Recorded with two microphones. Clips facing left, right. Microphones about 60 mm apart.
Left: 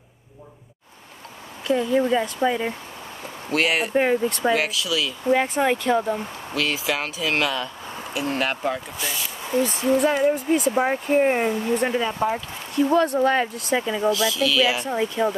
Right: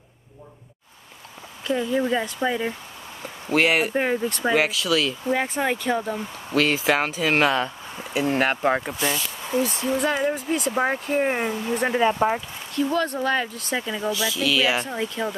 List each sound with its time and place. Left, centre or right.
1.7 s speech: centre
3.5 s speech: right
3.9 s speech: centre
4.8 s speech: right
5.3 s speech: centre
6.5 s speech: right
9.5 s speech: centre
11.9 s speech: right
12.7 s speech: left
13.8 s speech: centre
14.1 s speech: centre
14.9 s speech: centre